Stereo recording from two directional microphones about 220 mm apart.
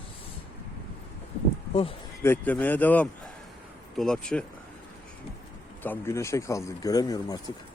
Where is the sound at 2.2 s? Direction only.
10° left (ahead or behind).